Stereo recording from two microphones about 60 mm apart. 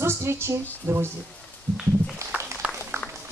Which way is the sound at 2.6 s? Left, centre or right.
Right.